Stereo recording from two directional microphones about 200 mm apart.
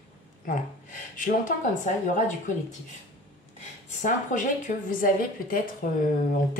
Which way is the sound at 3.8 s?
40° left (ahead or behind).